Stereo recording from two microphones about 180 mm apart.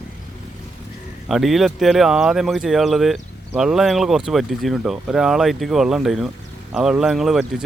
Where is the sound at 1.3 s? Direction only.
Centre (ahead or behind).